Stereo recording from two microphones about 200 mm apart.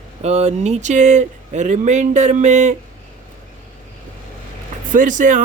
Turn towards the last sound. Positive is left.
turn(degrees=-40)  # may be behind; listen again after turning